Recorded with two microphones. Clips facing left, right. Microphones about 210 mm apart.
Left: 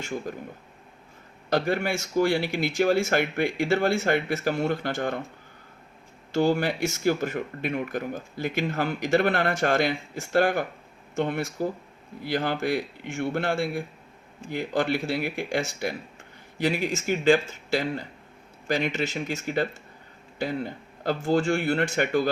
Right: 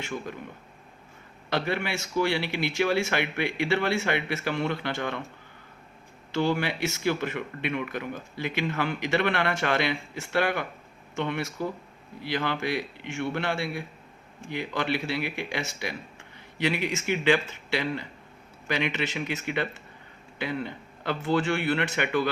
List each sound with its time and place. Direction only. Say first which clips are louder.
0.0 s speech: left 2 dB; 40° left (ahead or behind)
1.5 s speech: left 4 dB; 45° left (ahead or behind)
6.3 s speech: left 3 dB; 45° left (ahead or behind)